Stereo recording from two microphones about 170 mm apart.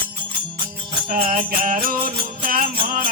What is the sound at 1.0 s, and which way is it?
Music, 55° right (ahead or behind).